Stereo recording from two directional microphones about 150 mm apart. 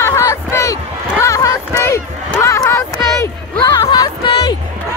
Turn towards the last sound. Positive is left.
turn(degrees=30)  # may be behind; listen again after turning